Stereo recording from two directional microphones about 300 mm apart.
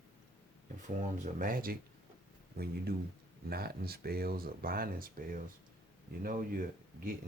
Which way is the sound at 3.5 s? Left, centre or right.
Right.